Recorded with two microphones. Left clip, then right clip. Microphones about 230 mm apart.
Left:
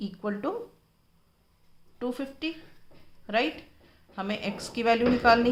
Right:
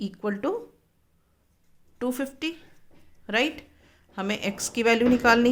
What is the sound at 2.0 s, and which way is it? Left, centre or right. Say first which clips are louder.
A woman's voice: right 4 dB; right.